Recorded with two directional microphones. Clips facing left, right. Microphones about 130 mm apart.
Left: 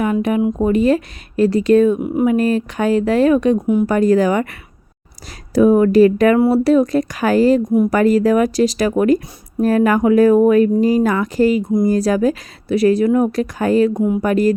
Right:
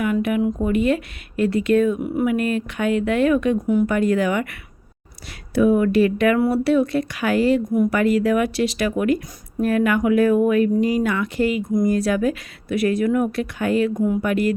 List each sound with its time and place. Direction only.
0.0 s speech: 30° left (ahead or behind)
5.5 s speech: 40° left (ahead or behind)